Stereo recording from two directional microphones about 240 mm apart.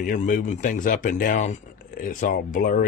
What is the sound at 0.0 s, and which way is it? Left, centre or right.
Speech, left.